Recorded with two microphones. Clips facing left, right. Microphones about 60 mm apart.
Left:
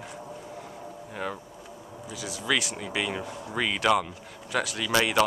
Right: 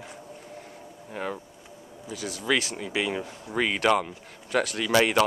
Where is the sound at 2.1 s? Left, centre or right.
Right.